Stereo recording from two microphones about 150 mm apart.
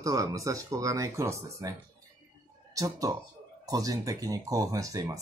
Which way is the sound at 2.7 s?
25° right (ahead or behind).